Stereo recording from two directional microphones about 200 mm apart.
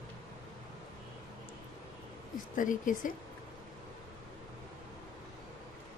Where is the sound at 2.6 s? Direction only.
40° left (ahead or behind).